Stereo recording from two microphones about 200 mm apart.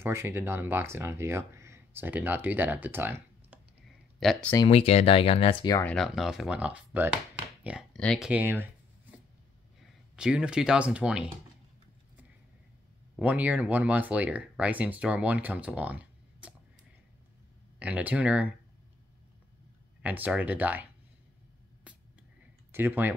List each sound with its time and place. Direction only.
0.0 s speech: 10° right (ahead or behind)
4.2 s speech: 5° left (ahead or behind)
4.6 s speech: 30° left (ahead or behind)
5.9 s speech: centre (ahead or behind)
8.3 s speech: 10° right (ahead or behind)
10.1 s speech: 5° right (ahead or behind)
13.2 s speech: 10° right (ahead or behind)
17.7 s speech: 5° right (ahead or behind)
20.0 s speech: 10° right (ahead or behind)
22.7 s speech: 10° right (ahead or behind)